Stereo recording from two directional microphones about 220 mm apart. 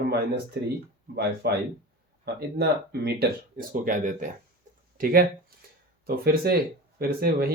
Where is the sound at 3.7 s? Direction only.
35° right (ahead or behind).